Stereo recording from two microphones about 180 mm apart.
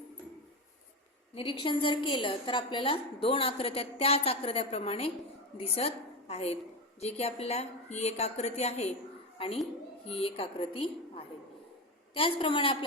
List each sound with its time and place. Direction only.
1.4 s a woman's voice: 30° left (ahead or behind)